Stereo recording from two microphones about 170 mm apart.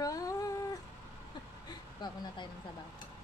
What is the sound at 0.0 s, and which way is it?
Cat, 20° left (ahead or behind).